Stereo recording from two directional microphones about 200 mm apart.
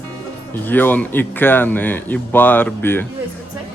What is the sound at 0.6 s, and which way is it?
Speech, 10° left (ahead or behind).